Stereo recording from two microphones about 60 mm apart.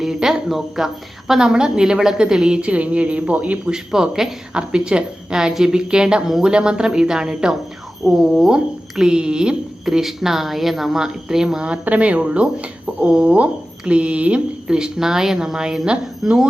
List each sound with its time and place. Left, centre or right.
0.0 s speech: centre
2.6 s speech: right
3.7 s speech: centre